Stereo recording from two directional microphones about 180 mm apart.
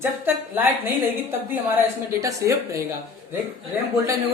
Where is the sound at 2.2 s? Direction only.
15° right (ahead or behind).